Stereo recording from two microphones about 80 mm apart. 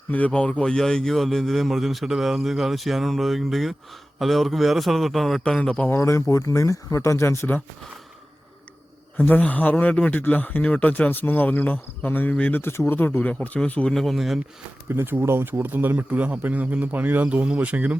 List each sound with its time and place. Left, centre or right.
0.1 s speech: centre
5.9 s speech: left
9.1 s speech: left
13.9 s speech: centre
14.8 s speech: right